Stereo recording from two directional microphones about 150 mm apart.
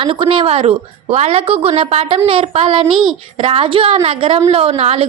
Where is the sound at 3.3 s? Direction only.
40° right (ahead or behind).